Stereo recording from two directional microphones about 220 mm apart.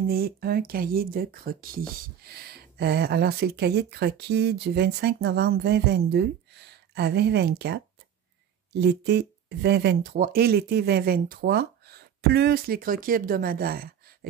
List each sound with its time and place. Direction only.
0.1 s speech: 45° right (ahead or behind)